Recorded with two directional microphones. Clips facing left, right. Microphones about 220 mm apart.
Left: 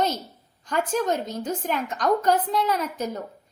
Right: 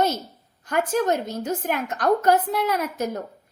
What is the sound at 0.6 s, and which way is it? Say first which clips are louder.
A woman's voice: right 2 dB; 10° right (ahead or behind).